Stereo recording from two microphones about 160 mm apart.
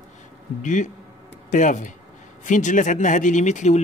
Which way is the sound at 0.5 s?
50° left (ahead or behind).